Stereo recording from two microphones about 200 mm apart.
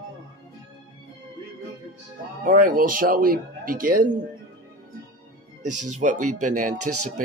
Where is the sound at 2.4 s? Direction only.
45° right (ahead or behind).